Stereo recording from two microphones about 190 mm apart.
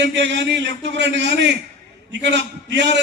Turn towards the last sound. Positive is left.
turn(degrees=-65)  # may be behind; listen again after turning